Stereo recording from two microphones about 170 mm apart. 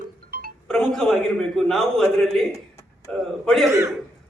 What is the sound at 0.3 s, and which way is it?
Music, 60° right (ahead or behind).